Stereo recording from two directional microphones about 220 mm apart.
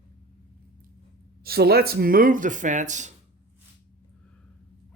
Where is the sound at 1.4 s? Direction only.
45° right (ahead or behind).